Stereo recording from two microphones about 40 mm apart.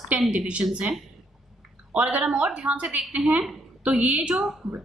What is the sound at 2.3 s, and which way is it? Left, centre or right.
A woman's voice, right.